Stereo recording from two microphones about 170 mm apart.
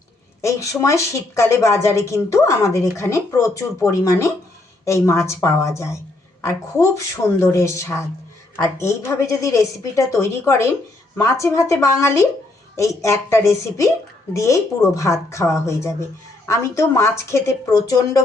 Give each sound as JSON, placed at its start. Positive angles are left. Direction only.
{"t": 0.4, "sound": "speech", "side_deg": 20}